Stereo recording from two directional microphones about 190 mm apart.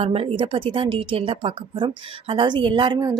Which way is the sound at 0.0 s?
30° right (ahead or behind).